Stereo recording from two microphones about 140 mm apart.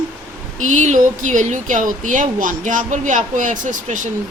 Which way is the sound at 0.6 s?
60° right (ahead or behind).